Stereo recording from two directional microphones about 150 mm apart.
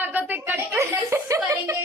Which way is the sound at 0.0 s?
10° right (ahead or behind).